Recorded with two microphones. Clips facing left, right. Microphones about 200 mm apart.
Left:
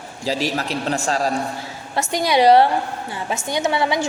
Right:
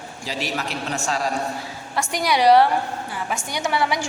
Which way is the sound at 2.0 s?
25° left (ahead or behind).